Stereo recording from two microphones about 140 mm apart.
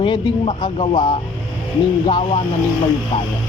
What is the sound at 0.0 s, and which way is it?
Speech, 35° left (ahead or behind).